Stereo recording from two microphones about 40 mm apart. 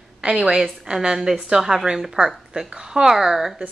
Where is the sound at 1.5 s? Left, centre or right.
Centre.